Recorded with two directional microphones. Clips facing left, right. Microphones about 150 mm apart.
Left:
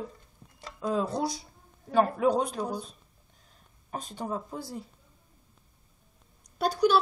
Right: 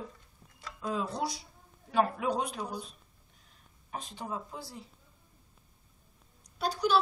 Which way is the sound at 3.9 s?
45° left (ahead or behind).